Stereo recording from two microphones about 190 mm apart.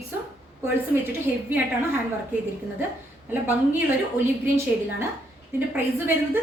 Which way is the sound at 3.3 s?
10° right (ahead or behind).